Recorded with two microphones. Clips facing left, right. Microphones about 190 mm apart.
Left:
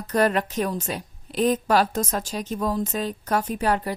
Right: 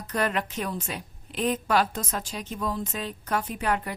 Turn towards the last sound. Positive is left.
turn(degrees=35)  # may be behind; listen again after turning